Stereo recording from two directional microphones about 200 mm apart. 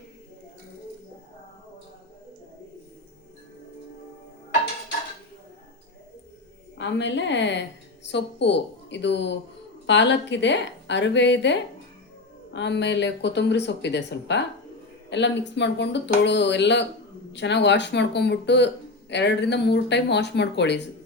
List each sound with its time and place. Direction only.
6.7 s speech: 65° left (ahead or behind)